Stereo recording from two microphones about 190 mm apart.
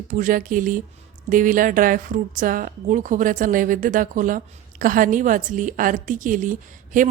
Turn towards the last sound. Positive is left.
turn(degrees=-45)  # may be behind; listen again after turning